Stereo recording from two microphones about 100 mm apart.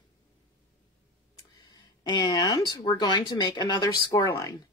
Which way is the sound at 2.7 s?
40° left (ahead or behind).